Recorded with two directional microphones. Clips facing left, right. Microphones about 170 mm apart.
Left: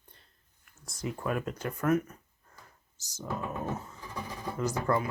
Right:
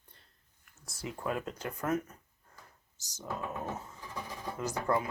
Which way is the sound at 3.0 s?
15° right (ahead or behind).